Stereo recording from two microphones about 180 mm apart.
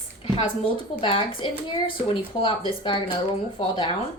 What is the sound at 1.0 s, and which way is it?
A woman's voice, 30° left (ahead or behind).